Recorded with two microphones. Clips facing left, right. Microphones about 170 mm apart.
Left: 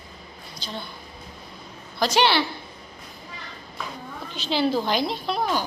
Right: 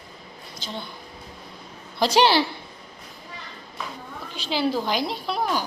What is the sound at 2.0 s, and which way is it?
Speech, 35° right (ahead or behind).